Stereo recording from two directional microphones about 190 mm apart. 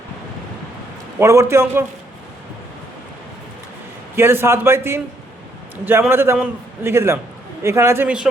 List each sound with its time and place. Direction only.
1.2 s a man's voice: 15° right (ahead or behind)
4.1 s a man's voice: 10° right (ahead or behind)